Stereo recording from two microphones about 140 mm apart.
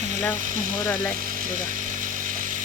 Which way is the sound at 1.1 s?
90° right.